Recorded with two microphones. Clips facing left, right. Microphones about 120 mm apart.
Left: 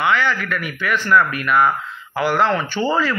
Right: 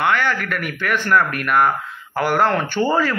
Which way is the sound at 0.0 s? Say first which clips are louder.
Even; 50° right (ahead or behind).